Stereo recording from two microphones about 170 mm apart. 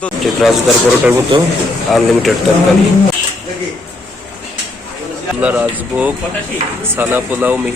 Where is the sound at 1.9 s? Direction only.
Centre (ahead or behind).